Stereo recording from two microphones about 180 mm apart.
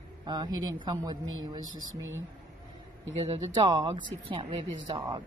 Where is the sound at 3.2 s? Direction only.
30° right (ahead or behind).